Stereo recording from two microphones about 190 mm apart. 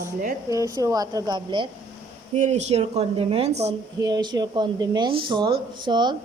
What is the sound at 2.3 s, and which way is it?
Speech, 35° right (ahead or behind).